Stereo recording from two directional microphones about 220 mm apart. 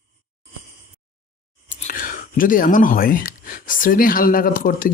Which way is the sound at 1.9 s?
40° left (ahead or behind).